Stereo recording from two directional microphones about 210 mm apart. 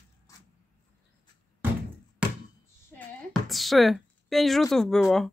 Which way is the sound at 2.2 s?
5° right (ahead or behind).